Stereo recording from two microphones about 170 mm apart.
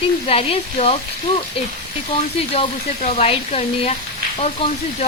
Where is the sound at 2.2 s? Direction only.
35° left (ahead or behind).